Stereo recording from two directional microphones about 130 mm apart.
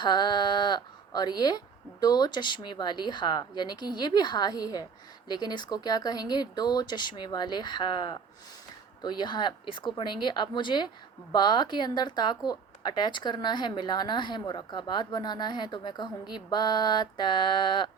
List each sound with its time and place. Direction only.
0.0 s a woman's voice: 35° left (ahead or behind)